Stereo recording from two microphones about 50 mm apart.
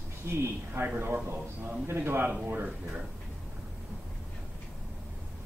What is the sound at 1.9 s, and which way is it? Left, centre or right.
Speech, right.